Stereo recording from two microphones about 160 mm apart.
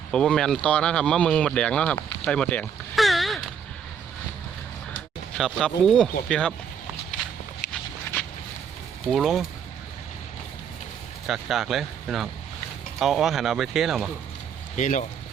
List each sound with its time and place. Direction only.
0.1 s speech: 5° left (ahead or behind)
2.2 s a sound: 5° left (ahead or behind)
5.4 s speech: centre (ahead or behind)
9.1 s speech: centre (ahead or behind)
11.3 s speech: centre (ahead or behind)
14.8 s speech: 50° left (ahead or behind)